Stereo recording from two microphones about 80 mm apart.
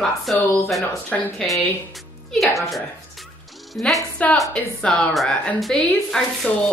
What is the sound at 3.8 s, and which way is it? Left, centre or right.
Speech, centre.